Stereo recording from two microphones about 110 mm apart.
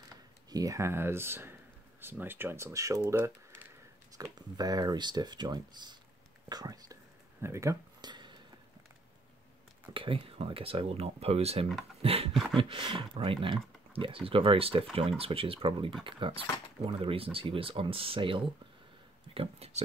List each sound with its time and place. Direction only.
0.5 s speech: 30° right (ahead or behind)
4.2 s speech: 35° right (ahead or behind)
8.0 s a sound: 45° right (ahead or behind)
9.9 s speech: 55° right (ahead or behind)
12.0 s a sound: 60° right (ahead or behind)
12.5 s speech: 50° right (ahead or behind)
19.3 s speech: 65° right (ahead or behind)